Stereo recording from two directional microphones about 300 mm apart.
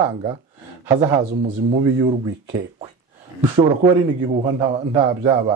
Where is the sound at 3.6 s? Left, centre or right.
Centre.